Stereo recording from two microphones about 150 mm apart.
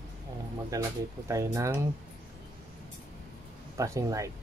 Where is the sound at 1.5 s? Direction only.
20° right (ahead or behind).